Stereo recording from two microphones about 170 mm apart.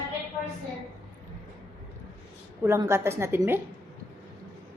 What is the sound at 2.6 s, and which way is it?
Speech, 15° right (ahead or behind).